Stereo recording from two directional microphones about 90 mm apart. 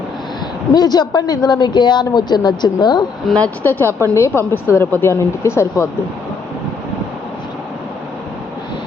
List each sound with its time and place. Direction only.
0.7 s a woman's voice: 50° left (ahead or behind)
3.3 s a woman's voice: 20° left (ahead or behind)